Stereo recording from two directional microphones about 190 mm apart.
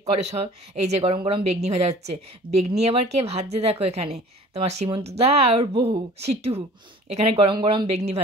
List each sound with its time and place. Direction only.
0.0 s a woman's voice: 35° right (ahead or behind)